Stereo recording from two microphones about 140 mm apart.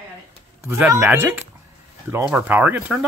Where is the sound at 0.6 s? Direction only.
15° right (ahead or behind).